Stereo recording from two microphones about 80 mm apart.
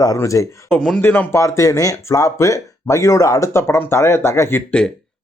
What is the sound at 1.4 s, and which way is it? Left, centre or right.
Speech, left.